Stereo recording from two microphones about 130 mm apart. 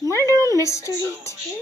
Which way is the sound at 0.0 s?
25° right (ahead or behind).